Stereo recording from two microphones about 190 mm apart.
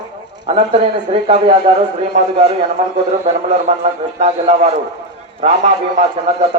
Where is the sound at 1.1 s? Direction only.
35° right (ahead or behind).